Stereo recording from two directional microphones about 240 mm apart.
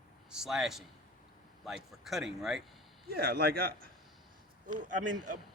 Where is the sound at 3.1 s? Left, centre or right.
Right.